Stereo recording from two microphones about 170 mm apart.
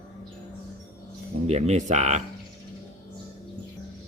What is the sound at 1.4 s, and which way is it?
Speech, 40° right (ahead or behind).